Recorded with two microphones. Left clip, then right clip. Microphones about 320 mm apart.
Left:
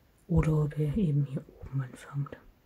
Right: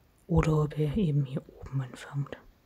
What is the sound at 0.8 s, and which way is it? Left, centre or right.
Speech, centre.